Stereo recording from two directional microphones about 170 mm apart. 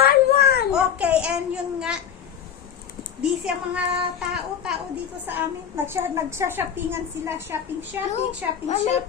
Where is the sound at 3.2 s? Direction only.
5° right (ahead or behind).